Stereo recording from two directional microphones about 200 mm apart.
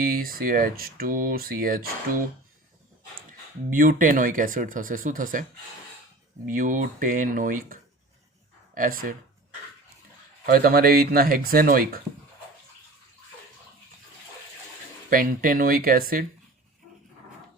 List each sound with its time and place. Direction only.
0.0 s speech: 45° right (ahead or behind)
3.7 s speech: 45° right (ahead or behind)
6.5 s speech: 40° right (ahead or behind)
10.4 s speech: 45° right (ahead or behind)
15.1 s speech: 45° right (ahead or behind)